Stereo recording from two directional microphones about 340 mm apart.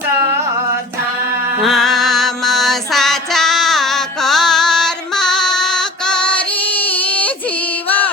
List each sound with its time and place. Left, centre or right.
1.6 s music: centre